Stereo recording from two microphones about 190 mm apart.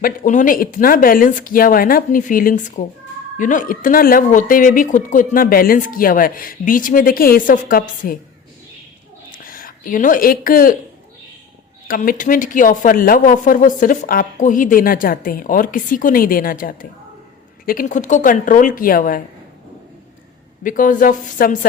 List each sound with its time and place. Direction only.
0.0 s speech: 45° left (ahead or behind)
9.3 s speech: 50° left (ahead or behind)
11.9 s speech: 45° left (ahead or behind)
20.7 s speech: 45° left (ahead or behind)